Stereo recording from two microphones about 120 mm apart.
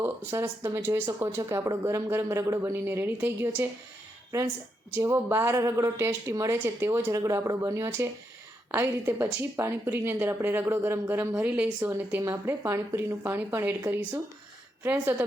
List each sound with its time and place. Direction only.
0.0 s speech: 20° right (ahead or behind)
4.9 s speech: 20° right (ahead or behind)
11.4 s speech: 10° right (ahead or behind)
12.2 s speech: 20° right (ahead or behind)